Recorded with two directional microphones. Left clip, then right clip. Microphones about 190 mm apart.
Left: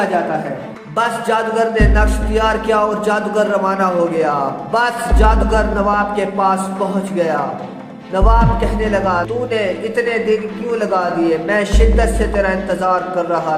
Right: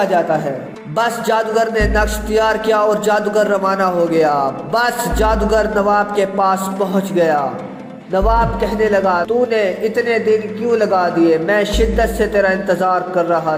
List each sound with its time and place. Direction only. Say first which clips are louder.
0.9 s music: even; 25° right (ahead or behind)